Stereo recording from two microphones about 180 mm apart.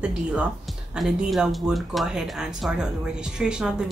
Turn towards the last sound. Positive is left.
turn(degrees=-5)  # may be behind; listen again after turning